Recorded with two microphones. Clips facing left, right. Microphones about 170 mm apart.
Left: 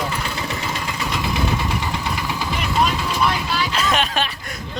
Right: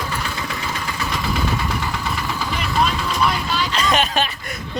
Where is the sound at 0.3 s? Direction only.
20° left (ahead or behind).